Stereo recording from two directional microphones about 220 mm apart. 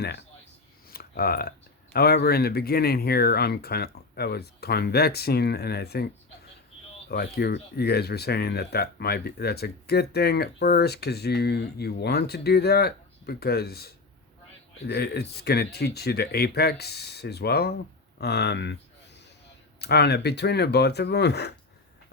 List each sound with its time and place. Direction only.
0.0 s speech: 50° left (ahead or behind)
7.1 s speech: 45° left (ahead or behind)
19.8 s speech: 50° left (ahead or behind)